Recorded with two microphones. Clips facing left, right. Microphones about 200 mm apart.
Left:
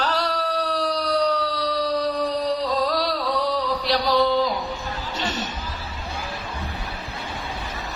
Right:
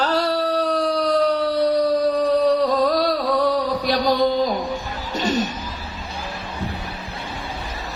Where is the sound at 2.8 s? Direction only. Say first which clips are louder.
Right 5 dB; 50° right (ahead or behind).